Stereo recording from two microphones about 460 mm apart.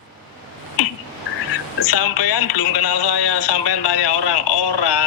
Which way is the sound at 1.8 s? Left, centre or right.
Left.